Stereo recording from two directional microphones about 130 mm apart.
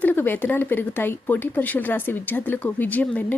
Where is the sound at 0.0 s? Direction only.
15° left (ahead or behind).